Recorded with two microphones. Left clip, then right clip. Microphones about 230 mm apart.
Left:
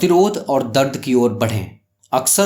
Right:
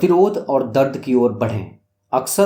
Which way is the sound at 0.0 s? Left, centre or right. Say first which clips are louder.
Even; left.